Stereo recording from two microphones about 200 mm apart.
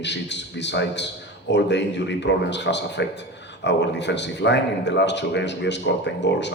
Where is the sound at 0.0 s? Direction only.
60° left (ahead or behind).